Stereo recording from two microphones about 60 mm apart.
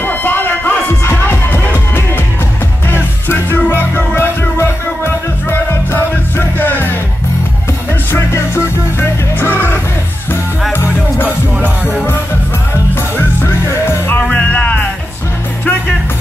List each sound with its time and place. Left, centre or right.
0.0 s music: left
8.1 s music: left
12.9 s music: left
14.3 s music: left